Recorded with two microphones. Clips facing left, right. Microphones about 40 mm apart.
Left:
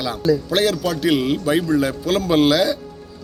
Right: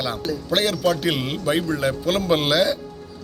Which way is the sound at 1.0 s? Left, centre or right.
Centre.